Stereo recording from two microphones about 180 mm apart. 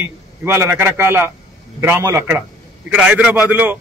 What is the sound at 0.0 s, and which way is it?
A man's voice, 15° right (ahead or behind).